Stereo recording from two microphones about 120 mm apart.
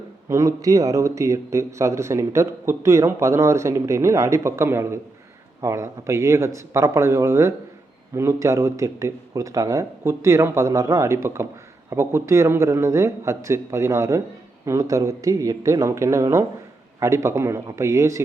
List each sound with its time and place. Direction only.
0.3 s speech: 25° right (ahead or behind)